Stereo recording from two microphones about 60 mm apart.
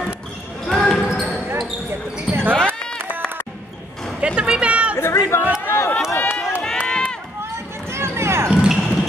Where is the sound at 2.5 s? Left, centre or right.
Centre.